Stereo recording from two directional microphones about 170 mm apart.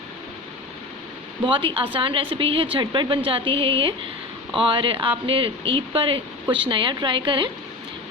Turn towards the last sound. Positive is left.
turn(degrees=-30)  # may be behind; listen again after turning